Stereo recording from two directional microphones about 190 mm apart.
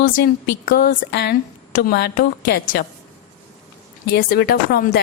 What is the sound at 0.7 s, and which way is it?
Speech, 55° left (ahead or behind).